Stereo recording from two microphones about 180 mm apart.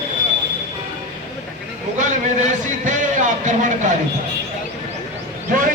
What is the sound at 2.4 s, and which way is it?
Speech, 45° right (ahead or behind).